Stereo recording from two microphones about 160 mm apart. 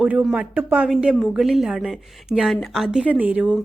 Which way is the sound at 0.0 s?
10° right (ahead or behind).